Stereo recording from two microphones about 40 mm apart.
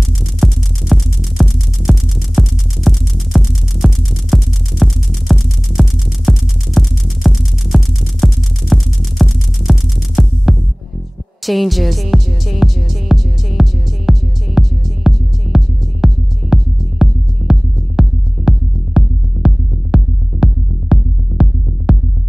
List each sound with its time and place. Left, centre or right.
0.4 s music: centre
1.9 s music: centre
3.3 s music: centre
3.8 s music: centre
11.4 s speech: centre
12.6 s music: centre
13.6 s music: centre